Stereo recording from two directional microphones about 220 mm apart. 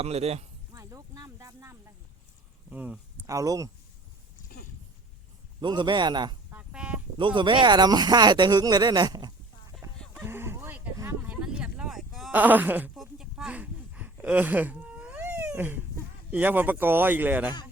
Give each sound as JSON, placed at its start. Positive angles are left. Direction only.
{"t": 0.0, "sound": "speech", "side_deg": -30}
{"t": 0.7, "sound": "a sound", "side_deg": -15}
{"t": 2.6, "sound": "speech", "side_deg": -5}
{"t": 5.5, "sound": "speech", "side_deg": -20}
{"t": 6.5, "sound": "a sound", "side_deg": -5}
{"t": 7.2, "sound": "speech", "side_deg": -20}
{"t": 9.8, "sound": "chicken", "side_deg": -10}
{"t": 10.2, "sound": "a sound", "side_deg": -10}
{"t": 16.3, "sound": "speech", "side_deg": -10}